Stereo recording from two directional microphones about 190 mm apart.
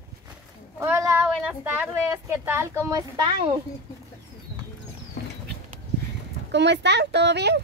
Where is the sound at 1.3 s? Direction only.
10° right (ahead or behind).